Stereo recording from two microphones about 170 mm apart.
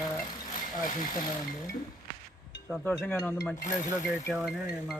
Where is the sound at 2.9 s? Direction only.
15° left (ahead or behind).